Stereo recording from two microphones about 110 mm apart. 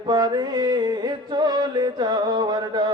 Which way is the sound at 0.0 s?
40° right (ahead or behind).